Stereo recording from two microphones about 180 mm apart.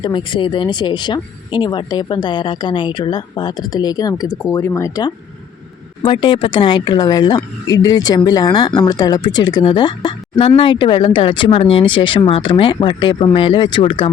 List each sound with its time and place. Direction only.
0.0 s speech: 25° left (ahead or behind)